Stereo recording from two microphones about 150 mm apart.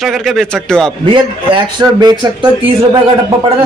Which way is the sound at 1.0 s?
35° right (ahead or behind).